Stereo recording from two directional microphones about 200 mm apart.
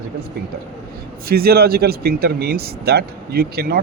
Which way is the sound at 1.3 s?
50° right (ahead or behind).